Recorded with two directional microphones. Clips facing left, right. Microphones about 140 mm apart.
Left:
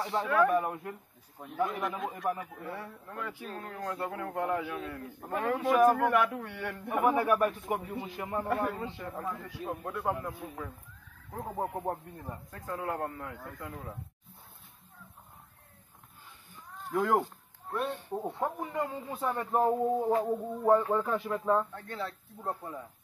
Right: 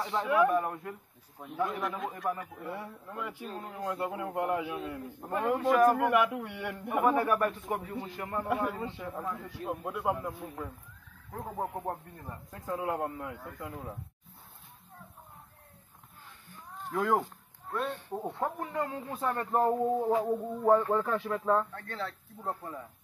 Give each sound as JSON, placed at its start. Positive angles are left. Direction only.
{"t": 0.2, "sound": "a man's voice", "side_deg": -15}
{"t": 0.6, "sound": "speech", "side_deg": 5}
{"t": 2.7, "sound": "a man's voice", "side_deg": -10}
{"t": 5.0, "sound": "a man's voice", "side_deg": 0}
{"t": 5.9, "sound": "a man's voice", "side_deg": -10}
{"t": 7.1, "sound": "a man's voice", "side_deg": 10}
{"t": 8.5, "sound": "speech", "side_deg": -5}
{"t": 12.4, "sound": "a man's voice", "side_deg": -15}
{"t": 17.0, "sound": "a sound", "side_deg": 10}
{"t": 18.4, "sound": "speech", "side_deg": 5}